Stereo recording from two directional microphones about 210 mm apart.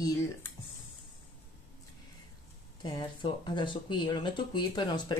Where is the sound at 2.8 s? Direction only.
20° left (ahead or behind).